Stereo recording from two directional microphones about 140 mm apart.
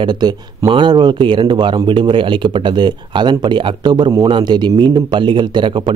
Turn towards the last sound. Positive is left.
turn(degrees=-35)  # may be behind; listen again after turning